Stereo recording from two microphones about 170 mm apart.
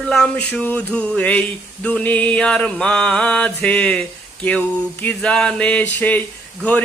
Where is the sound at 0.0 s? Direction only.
5° left (ahead or behind).